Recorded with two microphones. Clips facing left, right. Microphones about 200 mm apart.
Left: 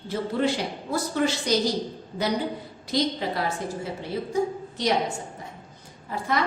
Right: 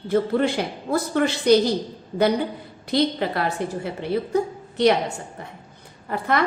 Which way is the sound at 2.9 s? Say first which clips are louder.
Right 4 dB; 60° right (ahead or behind).